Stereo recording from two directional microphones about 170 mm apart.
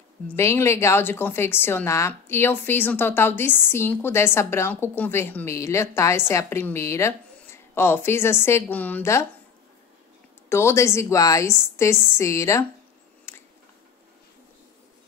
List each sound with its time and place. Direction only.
0.3 s a woman's voice: 15° left (ahead or behind)
10.5 s a woman's voice: 15° left (ahead or behind)
13.3 s a sound: 15° left (ahead or behind)